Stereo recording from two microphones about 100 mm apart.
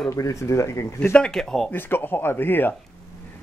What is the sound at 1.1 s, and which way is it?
Speech, 5° left (ahead or behind).